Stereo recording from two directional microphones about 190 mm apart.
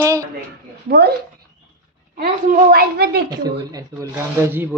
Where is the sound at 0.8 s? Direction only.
55° right (ahead or behind).